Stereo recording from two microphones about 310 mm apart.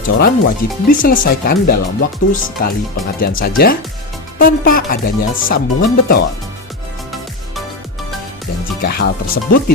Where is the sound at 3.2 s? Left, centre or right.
Left.